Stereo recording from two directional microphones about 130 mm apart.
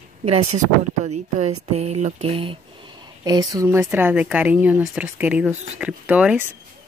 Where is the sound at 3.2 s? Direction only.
30° right (ahead or behind); by 6.4 s 10° right (ahead or behind).